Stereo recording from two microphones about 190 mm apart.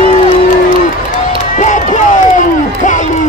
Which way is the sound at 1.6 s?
40° left (ahead or behind).